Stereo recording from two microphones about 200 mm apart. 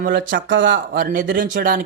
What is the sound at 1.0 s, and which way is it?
Speech, 45° right (ahead or behind).